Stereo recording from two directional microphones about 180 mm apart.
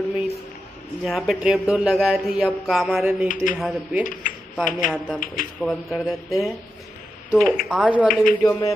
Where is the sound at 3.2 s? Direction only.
50° left (ahead or behind).